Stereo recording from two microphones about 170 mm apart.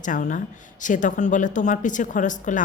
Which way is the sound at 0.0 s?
50° left (ahead or behind).